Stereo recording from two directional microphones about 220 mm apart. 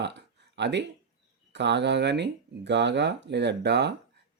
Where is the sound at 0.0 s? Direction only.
50° right (ahead or behind).